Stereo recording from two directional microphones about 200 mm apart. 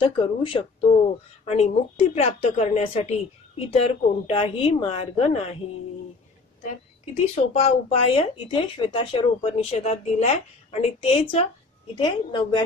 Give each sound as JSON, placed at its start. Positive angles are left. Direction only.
{"t": 0.0, "sound": "speech", "side_deg": 25}
{"t": 7.3, "sound": "speech", "side_deg": 30}